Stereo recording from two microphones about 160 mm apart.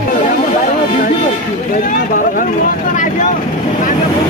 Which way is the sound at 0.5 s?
50° left (ahead or behind).